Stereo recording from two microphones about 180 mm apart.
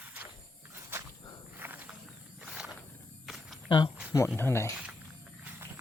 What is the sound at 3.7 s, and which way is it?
Speech, 25° left (ahead or behind).